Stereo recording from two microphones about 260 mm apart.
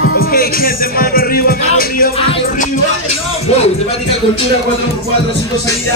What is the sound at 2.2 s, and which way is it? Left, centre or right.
Music, left.